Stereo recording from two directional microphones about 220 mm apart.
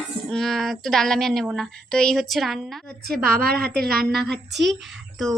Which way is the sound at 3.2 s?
45° right (ahead or behind).